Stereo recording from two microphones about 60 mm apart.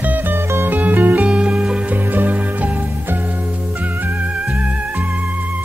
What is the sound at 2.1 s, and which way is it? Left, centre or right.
Music, right.